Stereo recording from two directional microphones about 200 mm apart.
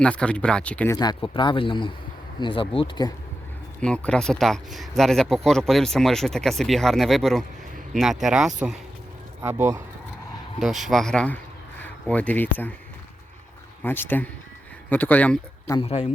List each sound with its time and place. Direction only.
0.0 s speech: 5° left (ahead or behind)
0.9 s speech: 20° left (ahead or behind)
3.8 s speech: 5° left (ahead or behind); by 9.8 s 15° right (ahead or behind)
10.6 s speech: centre (ahead or behind)
13.8 s speech: 10° left (ahead or behind)
15.7 s speech: 30° left (ahead or behind)